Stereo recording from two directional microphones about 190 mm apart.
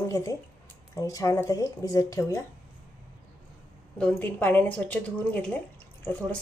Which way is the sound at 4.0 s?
10° left (ahead or behind).